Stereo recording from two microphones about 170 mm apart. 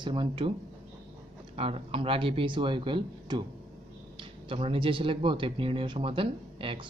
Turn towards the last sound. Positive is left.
turn(degrees=-30)  # may be behind; listen again after turning